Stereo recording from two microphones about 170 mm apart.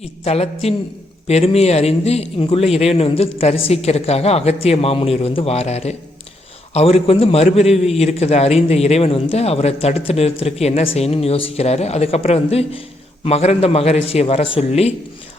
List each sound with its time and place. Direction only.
0.0 s a man's voice: 40° left (ahead or behind)